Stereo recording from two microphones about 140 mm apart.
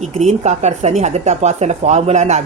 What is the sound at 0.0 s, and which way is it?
Speech, 55° right (ahead or behind).